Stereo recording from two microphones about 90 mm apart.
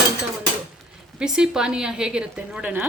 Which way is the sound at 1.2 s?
10° right (ahead or behind).